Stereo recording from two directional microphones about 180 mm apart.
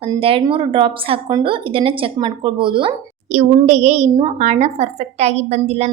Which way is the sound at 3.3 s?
40° right (ahead or behind).